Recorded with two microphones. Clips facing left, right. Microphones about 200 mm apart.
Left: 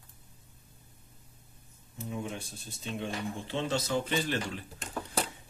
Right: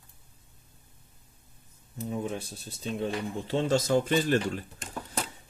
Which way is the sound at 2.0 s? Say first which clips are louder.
Right 5 dB; 35° right (ahead or behind).